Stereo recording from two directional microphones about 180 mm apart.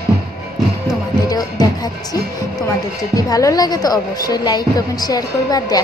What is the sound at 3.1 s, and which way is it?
Speech, 20° left (ahead or behind).